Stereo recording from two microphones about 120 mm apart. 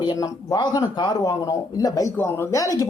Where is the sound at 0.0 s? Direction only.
35° left (ahead or behind).